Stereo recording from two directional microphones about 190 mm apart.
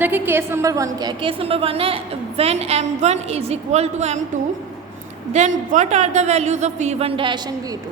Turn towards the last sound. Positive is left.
turn(degrees=-25)  # may be behind; listen again after turning